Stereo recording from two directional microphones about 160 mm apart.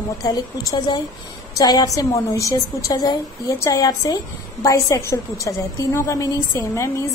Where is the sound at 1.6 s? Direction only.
25° left (ahead or behind).